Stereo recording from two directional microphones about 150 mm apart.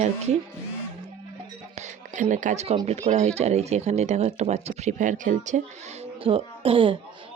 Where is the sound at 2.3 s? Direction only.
55° right (ahead or behind).